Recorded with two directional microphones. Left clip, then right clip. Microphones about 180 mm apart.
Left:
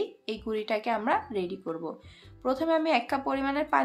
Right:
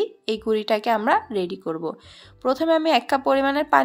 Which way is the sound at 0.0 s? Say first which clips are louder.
Right 9 dB; 40° right (ahead or behind).